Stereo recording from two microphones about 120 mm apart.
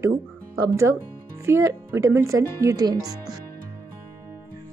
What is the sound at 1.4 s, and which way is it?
Speech, 20° right (ahead or behind).